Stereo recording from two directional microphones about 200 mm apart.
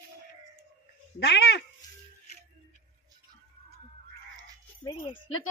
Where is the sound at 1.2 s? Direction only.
55° left (ahead or behind).